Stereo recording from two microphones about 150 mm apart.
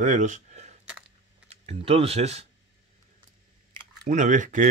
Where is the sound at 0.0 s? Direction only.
55° right (ahead or behind).